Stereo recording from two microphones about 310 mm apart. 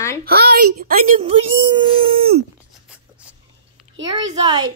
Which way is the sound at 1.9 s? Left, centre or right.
Centre.